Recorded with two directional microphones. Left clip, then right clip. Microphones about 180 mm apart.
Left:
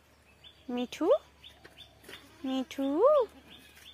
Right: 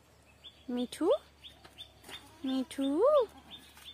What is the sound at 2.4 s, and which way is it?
Speech, 5° right (ahead or behind).